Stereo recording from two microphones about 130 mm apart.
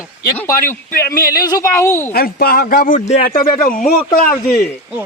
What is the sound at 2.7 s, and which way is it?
Speech, 90° left.